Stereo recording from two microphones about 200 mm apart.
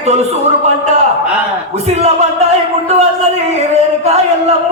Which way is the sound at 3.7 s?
30° right (ahead or behind).